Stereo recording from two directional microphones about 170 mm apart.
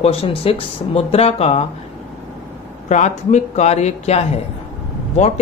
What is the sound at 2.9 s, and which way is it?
Speech, 45° left (ahead or behind).